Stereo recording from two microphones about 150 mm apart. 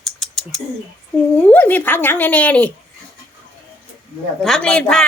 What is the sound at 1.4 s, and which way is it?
Speech, 10° left (ahead or behind).